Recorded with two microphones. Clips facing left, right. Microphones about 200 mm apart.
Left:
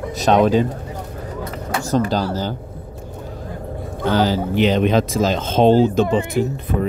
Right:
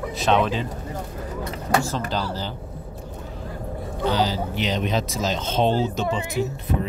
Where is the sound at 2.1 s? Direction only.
45° left (ahead or behind).